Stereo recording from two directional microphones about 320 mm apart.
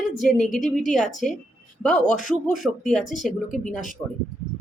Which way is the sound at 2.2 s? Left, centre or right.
Left.